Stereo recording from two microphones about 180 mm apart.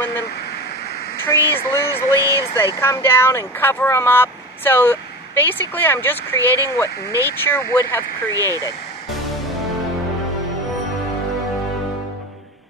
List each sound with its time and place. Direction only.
1.2 s speech: 15° left (ahead or behind)
7.1 s speech: 15° right (ahead or behind)
7.4 s speech: 15° left (ahead or behind)